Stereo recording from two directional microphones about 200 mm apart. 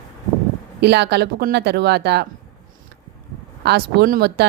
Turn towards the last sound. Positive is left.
turn(degrees=-55)  # may be behind; listen again after turning